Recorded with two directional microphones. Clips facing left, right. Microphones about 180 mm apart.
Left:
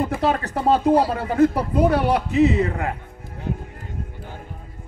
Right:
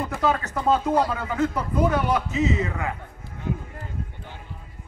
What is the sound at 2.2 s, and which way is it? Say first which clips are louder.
Speech: left 7 dB; 60° left (ahead or behind).